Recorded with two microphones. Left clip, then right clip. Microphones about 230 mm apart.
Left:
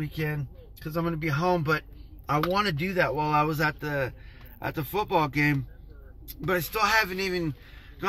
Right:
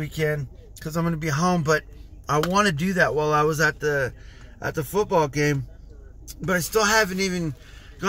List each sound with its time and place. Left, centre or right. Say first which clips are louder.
0.0 s speech: right 7 dB; centre